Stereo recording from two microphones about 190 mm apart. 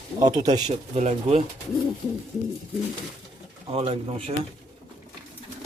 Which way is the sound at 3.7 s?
30° right (ahead or behind).